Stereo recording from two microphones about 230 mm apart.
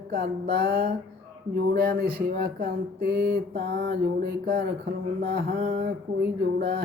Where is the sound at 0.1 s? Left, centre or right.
Right.